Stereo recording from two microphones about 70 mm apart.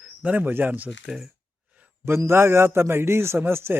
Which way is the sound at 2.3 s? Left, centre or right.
Right.